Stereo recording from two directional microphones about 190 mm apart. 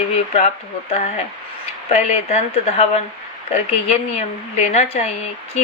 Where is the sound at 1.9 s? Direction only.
35° left (ahead or behind).